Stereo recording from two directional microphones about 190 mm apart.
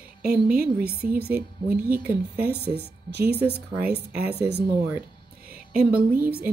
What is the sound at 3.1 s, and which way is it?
Speech, 60° right (ahead or behind).